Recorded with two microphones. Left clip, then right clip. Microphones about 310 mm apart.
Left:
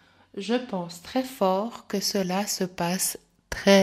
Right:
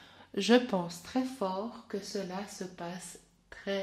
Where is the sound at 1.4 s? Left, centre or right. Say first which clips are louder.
Left 11 dB; left.